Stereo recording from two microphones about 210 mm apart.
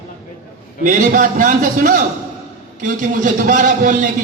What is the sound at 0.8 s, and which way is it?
A man's voice, 40° right (ahead or behind).